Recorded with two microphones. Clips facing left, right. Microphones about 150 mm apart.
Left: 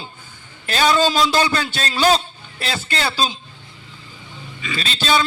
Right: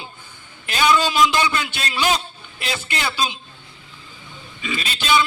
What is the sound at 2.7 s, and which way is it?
Speech, 35° left (ahead or behind).